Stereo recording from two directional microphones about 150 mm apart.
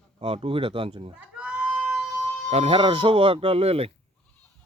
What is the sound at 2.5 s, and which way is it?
Speech, 40° right (ahead or behind).